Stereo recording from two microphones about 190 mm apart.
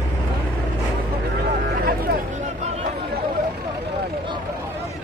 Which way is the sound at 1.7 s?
50° right (ahead or behind).